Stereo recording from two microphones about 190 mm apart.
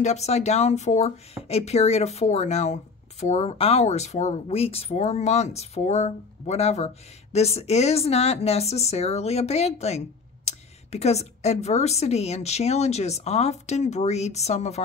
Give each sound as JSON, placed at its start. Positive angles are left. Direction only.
{"t": 0.0, "sound": "speech", "side_deg": 35}